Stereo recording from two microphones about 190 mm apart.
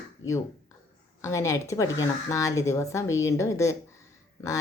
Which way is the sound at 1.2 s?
15° left (ahead or behind).